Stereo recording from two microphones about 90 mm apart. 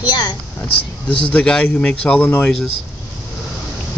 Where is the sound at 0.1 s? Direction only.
55° left (ahead or behind).